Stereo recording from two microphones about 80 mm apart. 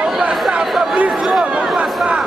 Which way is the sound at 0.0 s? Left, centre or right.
Centre.